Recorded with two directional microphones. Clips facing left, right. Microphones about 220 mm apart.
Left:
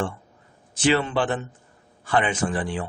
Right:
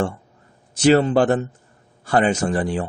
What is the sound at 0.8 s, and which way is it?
A man's voice, 40° right (ahead or behind).